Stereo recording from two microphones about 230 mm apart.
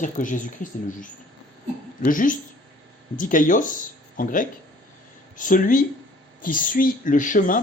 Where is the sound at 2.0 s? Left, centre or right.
Left.